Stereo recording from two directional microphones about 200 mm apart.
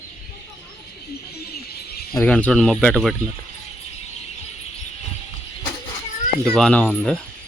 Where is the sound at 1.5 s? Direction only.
50° left (ahead or behind).